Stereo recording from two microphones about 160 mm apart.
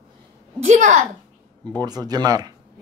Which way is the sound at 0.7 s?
45° right (ahead or behind).